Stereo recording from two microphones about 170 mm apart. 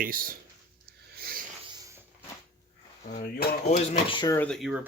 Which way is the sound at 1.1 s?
60° right (ahead or behind).